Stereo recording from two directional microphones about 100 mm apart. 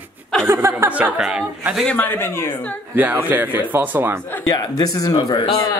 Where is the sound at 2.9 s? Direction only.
20° right (ahead or behind).